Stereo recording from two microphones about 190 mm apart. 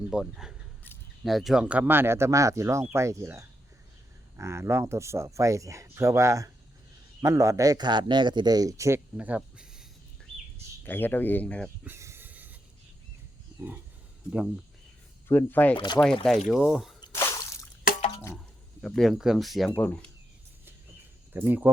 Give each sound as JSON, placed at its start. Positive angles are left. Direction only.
{"t": 0.1, "sound": "a man's voice", "side_deg": -5}
{"t": 10.8, "sound": "speech", "side_deg": 10}
{"t": 11.9, "sound": "snake", "side_deg": -15}
{"t": 15.3, "sound": "speech", "side_deg": 10}
{"t": 15.7, "sound": "speech", "side_deg": 25}
{"t": 16.5, "sound": "speech", "side_deg": 0}
{"t": 17.0, "sound": "drip", "side_deg": 15}
{"t": 18.8, "sound": "speech", "side_deg": 5}
{"t": 21.3, "sound": "speech", "side_deg": -10}